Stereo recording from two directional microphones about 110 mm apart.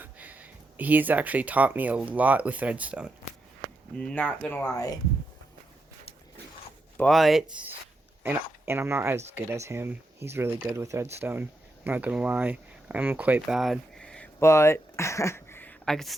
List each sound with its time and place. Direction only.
0.0 s speech: 15° right (ahead or behind)
3.9 s speech: 10° left (ahead or behind)
4.7 s speech: 35° left (ahead or behind)
7.1 s speech: centre (ahead or behind)
8.2 s speech: 20° right (ahead or behind)
13.6 s a sound: 5° left (ahead or behind)
14.3 s speech: 25° left (ahead or behind)
15.9 s speech: 5° left (ahead or behind)